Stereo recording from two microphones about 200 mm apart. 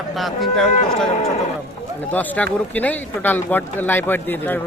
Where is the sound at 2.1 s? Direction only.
5° left (ahead or behind).